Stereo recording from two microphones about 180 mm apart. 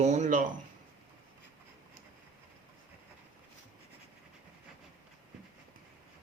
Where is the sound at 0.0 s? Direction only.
40° right (ahead or behind).